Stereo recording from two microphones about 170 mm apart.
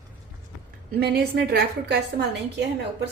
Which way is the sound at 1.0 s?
70° right (ahead or behind).